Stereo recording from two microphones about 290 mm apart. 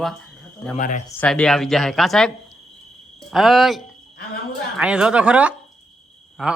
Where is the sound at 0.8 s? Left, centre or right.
Left.